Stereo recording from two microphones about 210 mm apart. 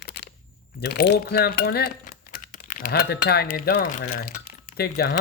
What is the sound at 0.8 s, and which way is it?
Speech, 50° left (ahead or behind).